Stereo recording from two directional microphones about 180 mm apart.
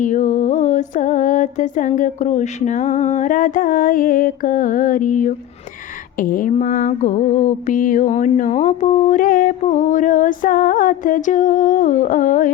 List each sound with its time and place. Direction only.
0.0 s mantra: 45° left (ahead or behind)